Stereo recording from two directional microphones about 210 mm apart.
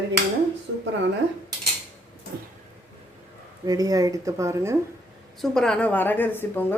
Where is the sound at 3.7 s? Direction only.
15° right (ahead or behind).